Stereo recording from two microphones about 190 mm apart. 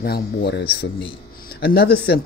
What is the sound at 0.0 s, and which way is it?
Speech, 55° left (ahead or behind).